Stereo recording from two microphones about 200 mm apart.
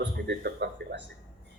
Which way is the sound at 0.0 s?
55° right (ahead or behind).